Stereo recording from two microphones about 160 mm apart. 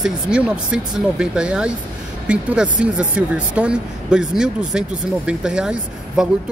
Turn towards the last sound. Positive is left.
turn(degrees=-5)  # may be behind; listen again after turning